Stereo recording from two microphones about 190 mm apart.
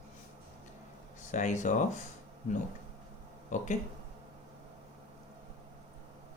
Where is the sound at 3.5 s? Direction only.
40° left (ahead or behind).